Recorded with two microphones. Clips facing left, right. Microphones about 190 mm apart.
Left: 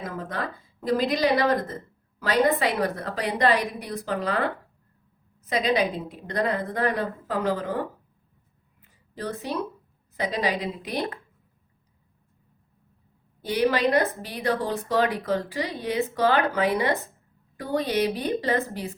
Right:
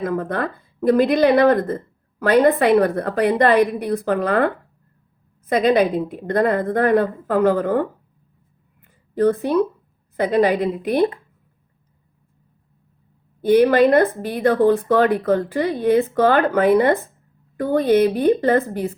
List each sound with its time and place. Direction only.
0.0 s speech: 55° right (ahead or behind)
8.8 s a sound: 55° right (ahead or behind)
10.2 s speech: 55° right (ahead or behind)
13.4 s speech: 55° right (ahead or behind)